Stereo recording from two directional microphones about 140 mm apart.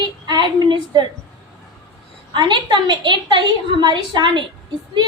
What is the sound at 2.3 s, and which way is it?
A woman's voice, 35° right (ahead or behind).